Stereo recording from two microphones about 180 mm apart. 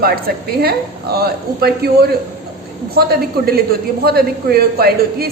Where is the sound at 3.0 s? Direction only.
60° right (ahead or behind).